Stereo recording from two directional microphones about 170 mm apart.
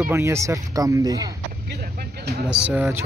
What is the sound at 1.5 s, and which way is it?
Vehicle, 60° right (ahead or behind).